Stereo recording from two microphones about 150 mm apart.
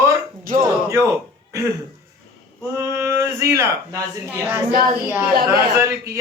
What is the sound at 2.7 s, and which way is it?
A man's voice, 20° right (ahead or behind).